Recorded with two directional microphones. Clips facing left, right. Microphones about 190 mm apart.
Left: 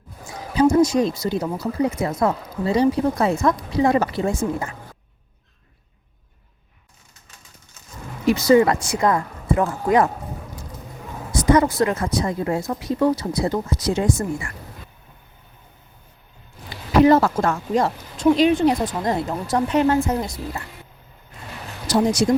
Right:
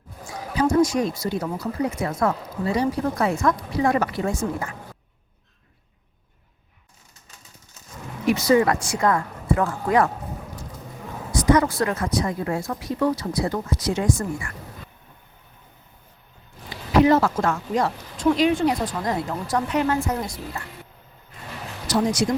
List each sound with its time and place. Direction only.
0.5 s speech: 20° left (ahead or behind)
8.3 s speech: 30° left (ahead or behind)
11.3 s speech: 25° left (ahead or behind)
17.1 s speech: 35° left (ahead or behind)
21.8 s speech: 30° left (ahead or behind)